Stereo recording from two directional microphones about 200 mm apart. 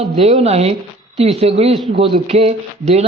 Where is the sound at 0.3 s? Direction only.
35° right (ahead or behind).